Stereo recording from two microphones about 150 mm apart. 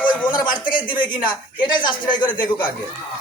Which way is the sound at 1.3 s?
30° left (ahead or behind).